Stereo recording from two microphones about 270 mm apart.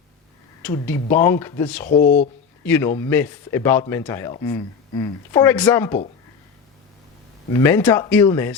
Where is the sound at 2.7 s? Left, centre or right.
Centre.